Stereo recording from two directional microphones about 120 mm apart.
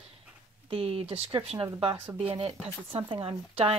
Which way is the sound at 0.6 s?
55° right (ahead or behind).